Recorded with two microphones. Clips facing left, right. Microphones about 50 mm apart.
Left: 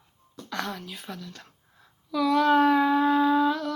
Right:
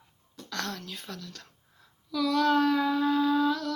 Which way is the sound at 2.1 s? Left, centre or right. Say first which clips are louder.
Left 4 dB; left.